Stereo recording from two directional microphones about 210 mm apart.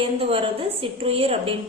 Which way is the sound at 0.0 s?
25° right (ahead or behind).